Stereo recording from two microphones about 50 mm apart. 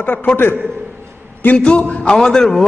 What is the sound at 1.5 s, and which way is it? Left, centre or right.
A man's voice, left.